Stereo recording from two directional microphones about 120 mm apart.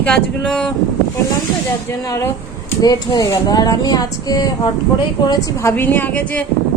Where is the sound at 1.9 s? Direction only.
20° left (ahead or behind).